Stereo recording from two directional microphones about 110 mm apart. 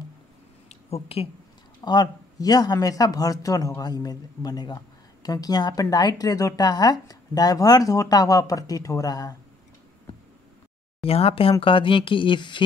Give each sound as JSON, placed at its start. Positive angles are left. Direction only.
{"t": 0.7, "sound": "a sound", "side_deg": 65}
{"t": 1.8, "sound": "speech", "side_deg": 35}
{"t": 11.0, "sound": "speech", "side_deg": 60}